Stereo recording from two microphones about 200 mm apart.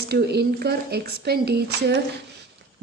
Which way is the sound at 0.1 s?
55° right (ahead or behind).